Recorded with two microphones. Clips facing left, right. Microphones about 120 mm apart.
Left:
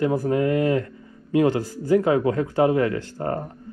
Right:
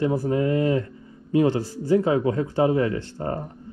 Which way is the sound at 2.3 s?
25° right (ahead or behind).